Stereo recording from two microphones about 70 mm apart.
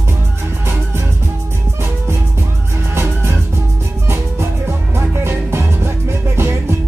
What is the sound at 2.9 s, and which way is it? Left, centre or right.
Music, right.